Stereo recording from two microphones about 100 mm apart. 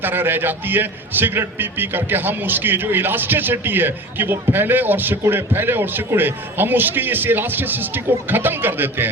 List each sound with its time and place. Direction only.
0.0 s a man's voice: 20° right (ahead or behind)